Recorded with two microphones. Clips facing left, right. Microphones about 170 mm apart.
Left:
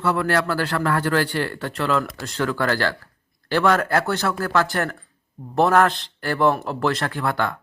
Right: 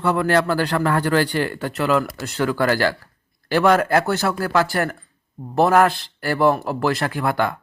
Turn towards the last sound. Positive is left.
turn(degrees=-10)  # may be behind; listen again after turning